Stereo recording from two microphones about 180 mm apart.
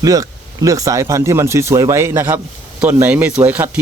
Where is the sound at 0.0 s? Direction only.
20° right (ahead or behind).